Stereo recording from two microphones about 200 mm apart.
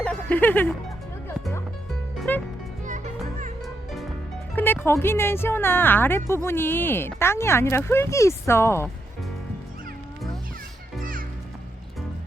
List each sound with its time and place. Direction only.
0.0 s music: 5° left (ahead or behind)
2.3 s music: 10° left (ahead or behind)
2.8 s music: 40° right (ahead or behind)
4.5 s speech: 10° left (ahead or behind)
11.0 s music: 45° right (ahead or behind)